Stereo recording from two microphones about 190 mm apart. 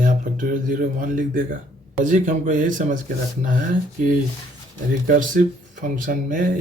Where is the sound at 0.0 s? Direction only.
45° right (ahead or behind).